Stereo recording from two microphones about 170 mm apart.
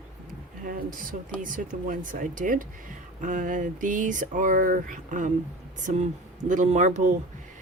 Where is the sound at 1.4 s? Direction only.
50° right (ahead or behind).